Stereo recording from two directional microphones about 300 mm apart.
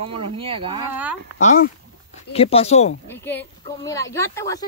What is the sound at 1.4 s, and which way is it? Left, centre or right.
Speech, left.